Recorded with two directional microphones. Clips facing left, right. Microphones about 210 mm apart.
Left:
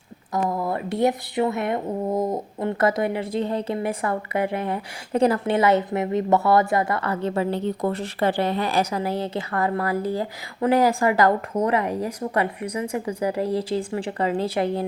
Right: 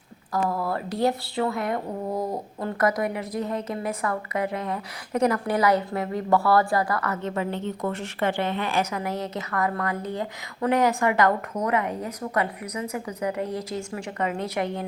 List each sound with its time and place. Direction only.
0.4 s a woman's voice: 20° left (ahead or behind)